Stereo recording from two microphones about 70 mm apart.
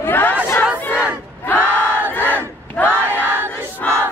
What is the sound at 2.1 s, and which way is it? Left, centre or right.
Battle cry, left.